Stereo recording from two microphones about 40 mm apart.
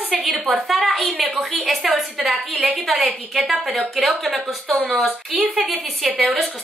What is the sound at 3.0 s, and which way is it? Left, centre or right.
Speech, right.